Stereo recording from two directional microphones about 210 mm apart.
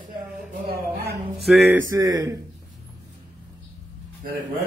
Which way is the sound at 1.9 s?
15° right (ahead or behind).